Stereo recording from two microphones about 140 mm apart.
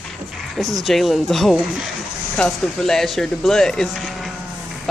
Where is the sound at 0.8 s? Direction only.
Centre (ahead or behind).